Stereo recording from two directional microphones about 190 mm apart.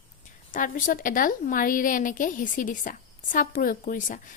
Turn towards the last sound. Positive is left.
turn(degrees=45)  # may be behind; listen again after turning